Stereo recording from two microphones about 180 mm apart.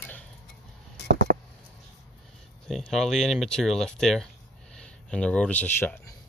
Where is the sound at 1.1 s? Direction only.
50° right (ahead or behind).